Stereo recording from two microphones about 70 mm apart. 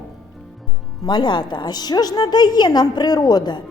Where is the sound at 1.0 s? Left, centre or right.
Left.